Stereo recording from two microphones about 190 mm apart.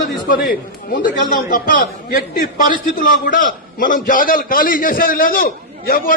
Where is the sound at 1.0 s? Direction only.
45° left (ahead or behind).